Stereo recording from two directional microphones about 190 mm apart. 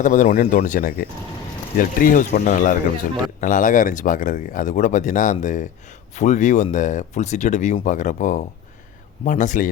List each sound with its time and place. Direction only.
0.0 s speech: 40° left (ahead or behind)